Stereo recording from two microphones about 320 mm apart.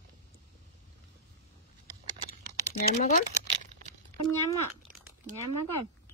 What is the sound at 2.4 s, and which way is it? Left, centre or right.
Typing, left.